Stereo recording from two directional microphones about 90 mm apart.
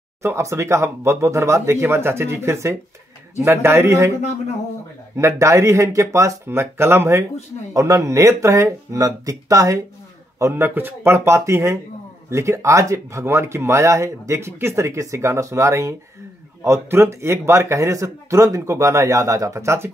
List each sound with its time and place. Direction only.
0.2 s speech: 30° right (ahead or behind)
5.1 s speech: 35° right (ahead or behind)
10.4 s speech: 25° right (ahead or behind)